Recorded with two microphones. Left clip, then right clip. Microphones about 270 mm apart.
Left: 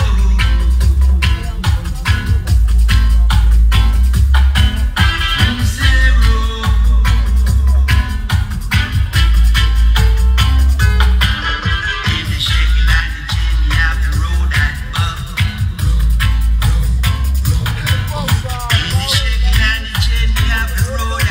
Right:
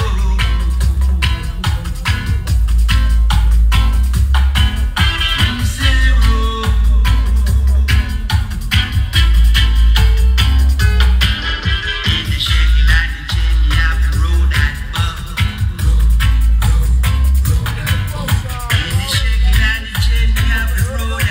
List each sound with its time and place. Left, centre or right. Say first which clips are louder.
1.2 s music: even; right
4.9 s music: even; centre
7.8 s music: left 1 dB; centre; by 15.4 s left
17.0 s music: left 2 dB; left